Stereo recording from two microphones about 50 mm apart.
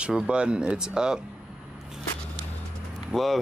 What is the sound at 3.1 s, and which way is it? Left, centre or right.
Speech, centre.